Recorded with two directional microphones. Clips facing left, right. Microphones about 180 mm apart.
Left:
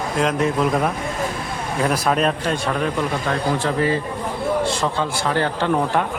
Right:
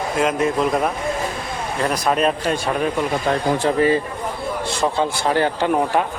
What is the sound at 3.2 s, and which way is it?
Speech, 20° right (ahead or behind).